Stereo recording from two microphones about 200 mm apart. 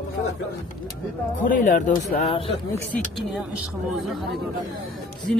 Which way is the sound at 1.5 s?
40° left (ahead or behind).